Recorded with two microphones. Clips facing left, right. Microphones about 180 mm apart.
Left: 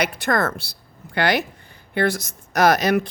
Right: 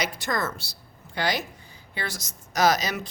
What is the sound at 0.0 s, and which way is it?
A woman's voice, 60° left (ahead or behind).